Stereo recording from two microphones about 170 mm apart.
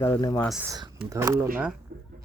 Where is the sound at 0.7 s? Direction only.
25° right (ahead or behind).